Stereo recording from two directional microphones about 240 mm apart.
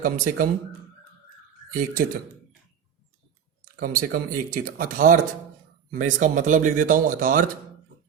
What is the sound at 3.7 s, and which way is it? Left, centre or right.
Speech, right.